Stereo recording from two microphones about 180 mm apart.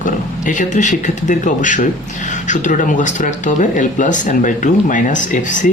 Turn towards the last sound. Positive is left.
turn(degrees=45)  # may be behind; listen again after turning